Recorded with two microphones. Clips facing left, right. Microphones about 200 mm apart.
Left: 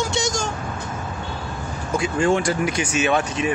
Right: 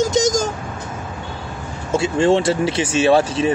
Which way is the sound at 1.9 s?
25° right (ahead or behind).